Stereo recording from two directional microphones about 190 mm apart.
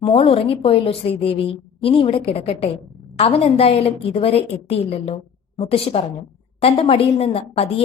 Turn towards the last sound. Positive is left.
turn(degrees=30)  # may be behind; listen again after turning